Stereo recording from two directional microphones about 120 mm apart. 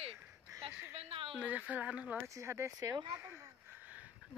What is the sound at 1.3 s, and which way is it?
Speech, 10° right (ahead or behind).